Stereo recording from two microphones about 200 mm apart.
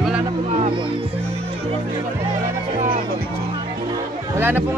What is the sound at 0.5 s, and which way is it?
Music, 30° right (ahead or behind).